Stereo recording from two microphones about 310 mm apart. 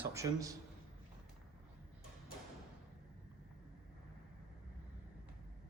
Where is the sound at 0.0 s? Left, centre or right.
Centre.